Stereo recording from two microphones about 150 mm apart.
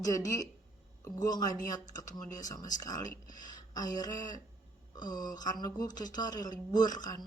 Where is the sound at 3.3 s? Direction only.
25° left (ahead or behind).